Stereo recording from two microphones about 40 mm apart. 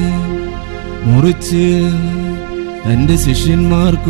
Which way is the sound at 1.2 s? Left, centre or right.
Centre.